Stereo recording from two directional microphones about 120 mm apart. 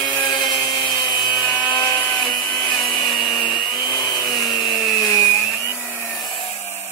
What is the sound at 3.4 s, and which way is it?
Tools, 40° left (ahead or behind).